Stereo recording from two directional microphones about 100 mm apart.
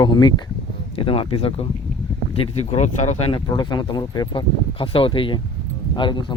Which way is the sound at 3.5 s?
45° left (ahead or behind).